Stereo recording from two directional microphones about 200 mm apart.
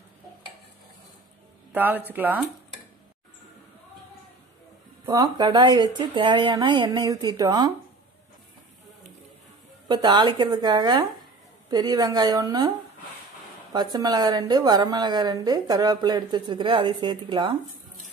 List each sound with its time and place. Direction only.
1.7 s speech: 10° right (ahead or behind)
5.0 s a woman's voice: 20° right (ahead or behind)
9.8 s a woman's voice: 20° right (ahead or behind)
13.7 s a woman's voice: 20° right (ahead or behind)